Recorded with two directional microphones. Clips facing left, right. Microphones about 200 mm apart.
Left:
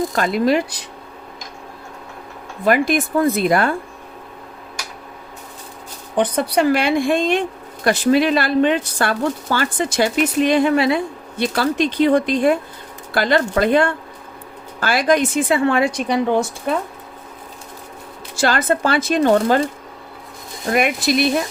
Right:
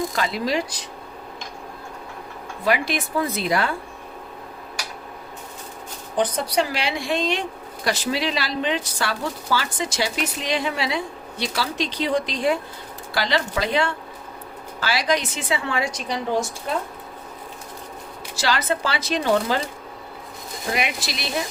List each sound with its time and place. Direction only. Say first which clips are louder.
0.2 s speech: left 9 dB; 55° left (ahead or behind)
2.6 s speech: left 6 dB; 50° left (ahead or behind)
6.1 s speech: left 4 dB; 60° left (ahead or behind)
18.3 s speech: left 6 dB; 50° left (ahead or behind)
20.7 s speech: left 12 dB; 50° left (ahead or behind)